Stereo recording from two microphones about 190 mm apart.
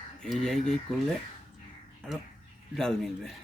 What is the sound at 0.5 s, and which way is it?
Speech, 35° left (ahead or behind).